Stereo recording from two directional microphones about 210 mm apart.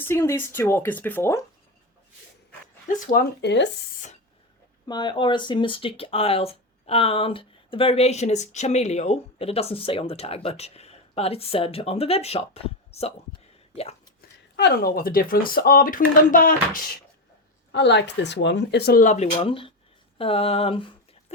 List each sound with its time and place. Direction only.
0.1 s speech: 10° left (ahead or behind)
2.9 s speech: 45° left (ahead or behind)
4.9 s speech: 20° left (ahead or behind)
14.2 s speech: 50° left (ahead or behind)
17.7 s speech: 55° left (ahead or behind); by 21.3 s 25° left (ahead or behind)